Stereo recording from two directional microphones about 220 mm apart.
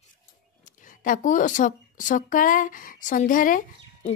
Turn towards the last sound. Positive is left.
turn(degrees=35)  # may be behind; listen again after turning